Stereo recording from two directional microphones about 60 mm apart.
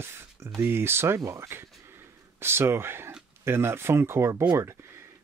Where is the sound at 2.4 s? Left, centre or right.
Right.